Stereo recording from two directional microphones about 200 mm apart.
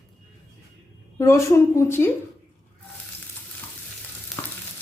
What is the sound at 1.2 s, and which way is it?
Speech, 15° left (ahead or behind).